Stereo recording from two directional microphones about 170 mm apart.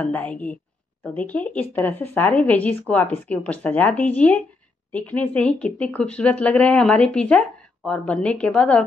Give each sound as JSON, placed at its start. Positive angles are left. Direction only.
{"t": 0.0, "sound": "speech", "side_deg": 10}